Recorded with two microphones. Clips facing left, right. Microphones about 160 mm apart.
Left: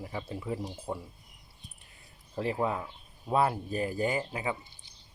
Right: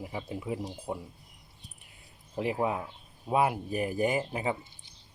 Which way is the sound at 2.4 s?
15° right (ahead or behind).